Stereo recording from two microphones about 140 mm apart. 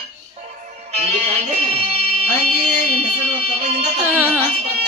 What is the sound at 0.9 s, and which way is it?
Music, 50° right (ahead or behind).